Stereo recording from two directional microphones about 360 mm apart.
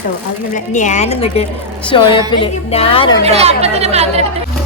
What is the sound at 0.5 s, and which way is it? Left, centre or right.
Speech, centre.